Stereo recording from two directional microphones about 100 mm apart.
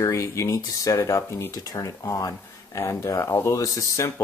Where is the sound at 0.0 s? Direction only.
30° left (ahead or behind).